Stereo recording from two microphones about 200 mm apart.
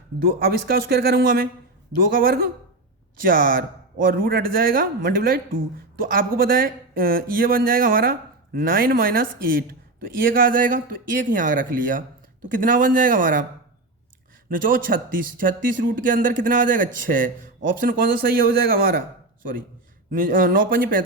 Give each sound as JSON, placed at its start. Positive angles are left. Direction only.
{"t": 0.2, "sound": "speech", "side_deg": -50}
{"t": 14.5, "sound": "speech", "side_deg": -45}
{"t": 20.1, "sound": "speech", "side_deg": -45}